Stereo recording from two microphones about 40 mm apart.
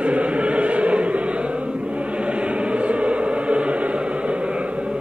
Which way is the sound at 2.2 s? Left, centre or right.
Right.